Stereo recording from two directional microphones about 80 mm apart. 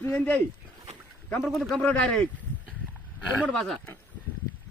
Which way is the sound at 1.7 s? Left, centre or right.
Centre.